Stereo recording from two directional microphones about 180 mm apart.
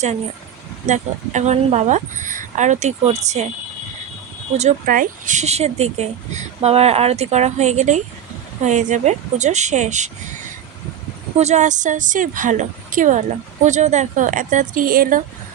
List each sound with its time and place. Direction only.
0.9 s speech: 40° right (ahead or behind)
4.5 s speech: 45° right (ahead or behind)
11.3 s speech: 40° right (ahead or behind)